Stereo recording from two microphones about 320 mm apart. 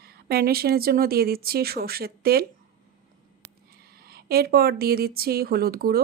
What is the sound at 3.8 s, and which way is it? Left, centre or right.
Speech, right.